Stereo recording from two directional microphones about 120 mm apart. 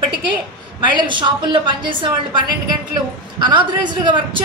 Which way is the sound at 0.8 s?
40° right (ahead or behind).